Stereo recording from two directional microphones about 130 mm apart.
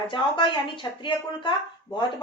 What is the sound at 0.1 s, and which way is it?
Speech, 40° left (ahead or behind).